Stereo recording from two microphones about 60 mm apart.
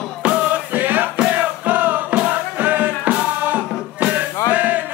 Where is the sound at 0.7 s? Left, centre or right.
Right.